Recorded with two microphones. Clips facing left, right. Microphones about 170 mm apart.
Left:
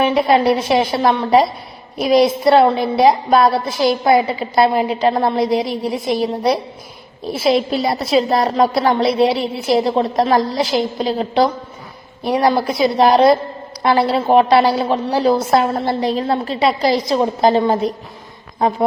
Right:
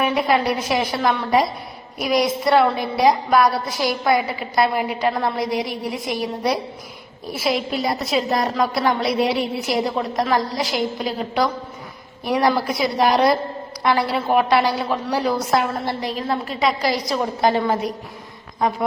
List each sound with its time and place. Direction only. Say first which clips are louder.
0.0 s a woman's voice: left 5 dB; 25° left (ahead or behind)